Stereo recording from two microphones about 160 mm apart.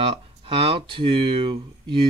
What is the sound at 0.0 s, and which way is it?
Speech, 35° right (ahead or behind).